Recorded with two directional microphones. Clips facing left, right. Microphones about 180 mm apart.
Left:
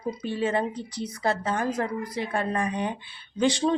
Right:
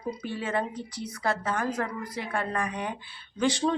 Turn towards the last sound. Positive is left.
turn(degrees=15)  # may be behind; listen again after turning